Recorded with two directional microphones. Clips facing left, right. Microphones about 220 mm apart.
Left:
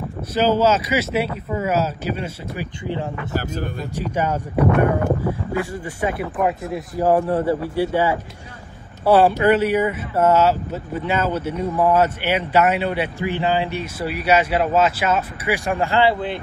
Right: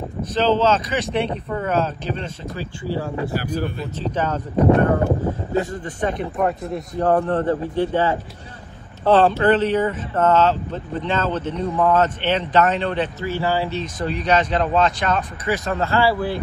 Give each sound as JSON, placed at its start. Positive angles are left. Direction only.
{"t": 0.2, "sound": "speech", "side_deg": 10}
{"t": 3.3, "sound": "speech", "side_deg": 45}
{"t": 3.9, "sound": "speech", "side_deg": 10}
{"t": 5.7, "sound": "speech", "side_deg": 10}